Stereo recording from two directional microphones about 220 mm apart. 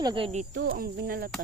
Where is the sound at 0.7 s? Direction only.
40° right (ahead or behind).